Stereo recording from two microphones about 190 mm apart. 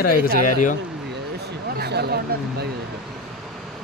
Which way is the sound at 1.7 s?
60° right (ahead or behind).